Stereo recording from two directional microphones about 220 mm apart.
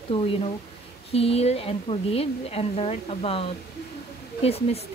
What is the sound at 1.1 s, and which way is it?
A woman's voice, 25° left (ahead or behind).